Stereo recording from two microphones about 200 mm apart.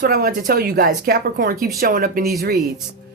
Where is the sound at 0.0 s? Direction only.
50° right (ahead or behind).